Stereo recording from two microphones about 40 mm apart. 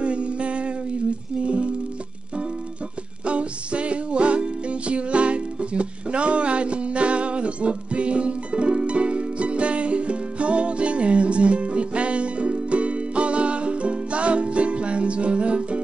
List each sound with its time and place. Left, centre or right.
0.0 s a sound: right
1.4 s music: right
3.3 s music: right